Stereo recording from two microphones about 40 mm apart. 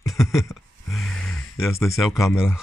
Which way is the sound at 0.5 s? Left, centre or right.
Centre.